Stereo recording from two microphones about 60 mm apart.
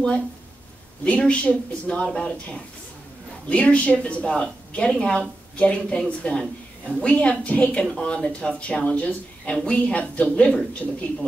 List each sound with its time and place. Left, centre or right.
1.0 s a woman's voice: left